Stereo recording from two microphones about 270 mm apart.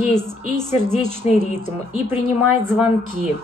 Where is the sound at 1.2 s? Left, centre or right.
Left.